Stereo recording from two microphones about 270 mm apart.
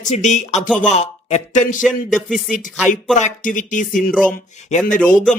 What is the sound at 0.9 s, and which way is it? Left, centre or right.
Speech, left.